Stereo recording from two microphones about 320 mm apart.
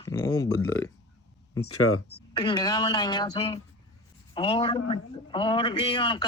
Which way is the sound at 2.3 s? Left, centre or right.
Centre.